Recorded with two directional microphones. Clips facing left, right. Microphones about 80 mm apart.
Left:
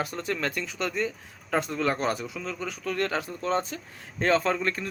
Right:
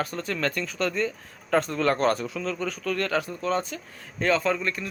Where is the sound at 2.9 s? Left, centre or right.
Left.